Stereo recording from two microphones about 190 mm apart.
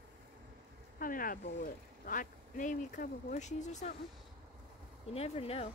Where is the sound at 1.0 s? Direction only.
45° left (ahead or behind).